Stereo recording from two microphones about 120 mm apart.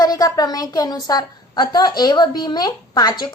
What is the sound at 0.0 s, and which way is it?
A woman's voice, 30° left (ahead or behind).